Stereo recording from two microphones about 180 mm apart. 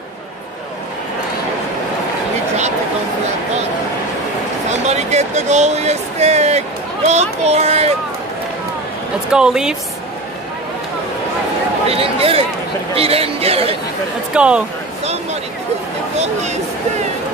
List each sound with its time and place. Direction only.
4.6 s speech: 40° right (ahead or behind)
9.3 s speech: 5° right (ahead or behind)
11.9 s speech: 30° right (ahead or behind)
14.3 s speech: 5° right (ahead or behind)